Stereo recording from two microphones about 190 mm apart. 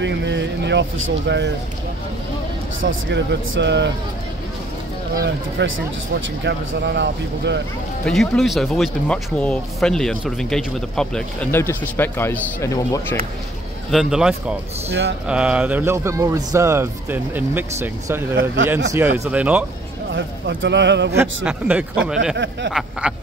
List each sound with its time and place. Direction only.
0.0 s vehicle: 70° right (ahead or behind)
2.8 s speech: 80° right
5.1 s speech: 55° right (ahead or behind)
8.0 s speech: centre (ahead or behind)
13.8 s speech: centre (ahead or behind)
20.1 s speech: 70° right (ahead or behind)
21.5 s speech: 5° right (ahead or behind)